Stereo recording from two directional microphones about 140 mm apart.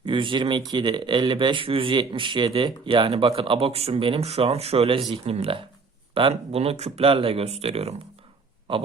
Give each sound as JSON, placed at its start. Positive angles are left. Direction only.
{"t": 0.0, "sound": "speech", "side_deg": -35}